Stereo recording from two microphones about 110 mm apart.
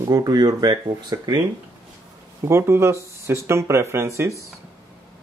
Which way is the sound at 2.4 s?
25° right (ahead or behind).